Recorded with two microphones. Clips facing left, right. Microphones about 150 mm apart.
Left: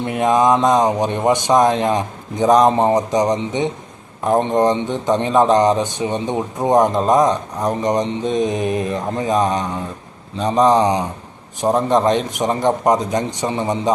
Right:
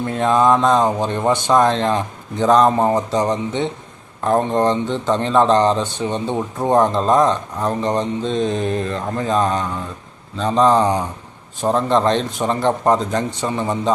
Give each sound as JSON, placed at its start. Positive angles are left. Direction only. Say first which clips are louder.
{"t": 0.0, "sound": "a man's voice", "louder": "left 1 dB", "side_deg": 15}